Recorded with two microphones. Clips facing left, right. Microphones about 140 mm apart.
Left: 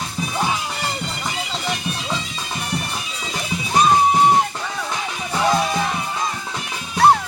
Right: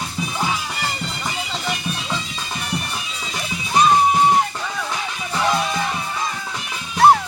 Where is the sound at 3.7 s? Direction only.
10° left (ahead or behind).